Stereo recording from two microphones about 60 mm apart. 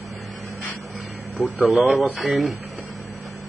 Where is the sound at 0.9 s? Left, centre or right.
Centre.